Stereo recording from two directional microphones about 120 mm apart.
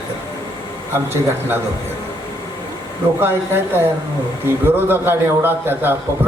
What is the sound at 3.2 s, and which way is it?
A man's voice, 20° right (ahead or behind).